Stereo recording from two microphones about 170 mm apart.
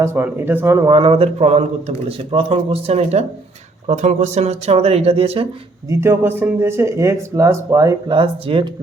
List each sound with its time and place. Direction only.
0.0 s speech: 15° right (ahead or behind)
0.9 s speech: 30° right (ahead or behind)
5.9 s speech: 15° right (ahead or behind); by 8.7 s 30° right (ahead or behind)